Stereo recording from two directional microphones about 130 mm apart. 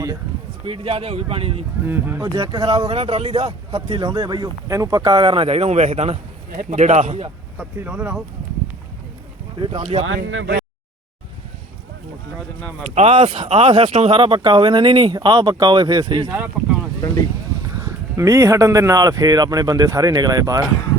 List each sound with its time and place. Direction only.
0.6 s speech: 45° right (ahead or behind)
1.8 s speech: 15° right (ahead or behind)
2.2 s speech: 40° right (ahead or behind)
4.7 s speech: 25° right (ahead or behind)
5.1 s speech: 40° right (ahead or behind)
6.6 s a man's voice: 70° right (ahead or behind)
7.8 s speech: 10° right (ahead or behind)
9.6 s speech: 45° right (ahead or behind)
12.9 s speech: 50° right (ahead or behind); by 16.3 s 35° right (ahead or behind)
16.3 s speech: 15° right (ahead or behind)
17.7 s speech: 25° right (ahead or behind)